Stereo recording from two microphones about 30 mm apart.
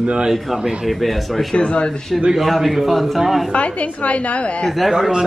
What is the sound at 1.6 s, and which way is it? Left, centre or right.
Speech, left.